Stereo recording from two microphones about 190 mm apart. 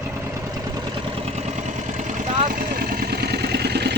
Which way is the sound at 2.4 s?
50° right (ahead or behind).